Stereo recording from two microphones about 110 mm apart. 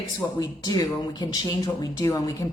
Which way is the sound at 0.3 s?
35° left (ahead or behind).